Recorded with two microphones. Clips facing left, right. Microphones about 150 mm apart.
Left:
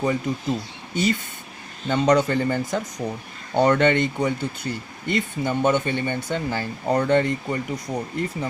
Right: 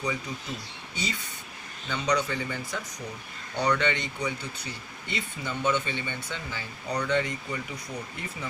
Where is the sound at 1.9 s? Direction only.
50° left (ahead or behind).